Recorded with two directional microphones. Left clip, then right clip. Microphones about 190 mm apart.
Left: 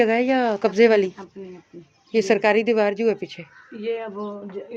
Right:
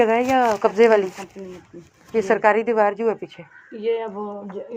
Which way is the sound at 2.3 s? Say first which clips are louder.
Right 1 dB; 50° left (ahead or behind).